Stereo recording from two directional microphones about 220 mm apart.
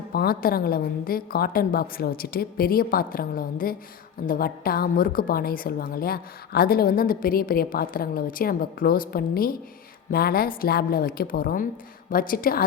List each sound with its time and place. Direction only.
0.1 s a woman's voice: 45° left (ahead or behind)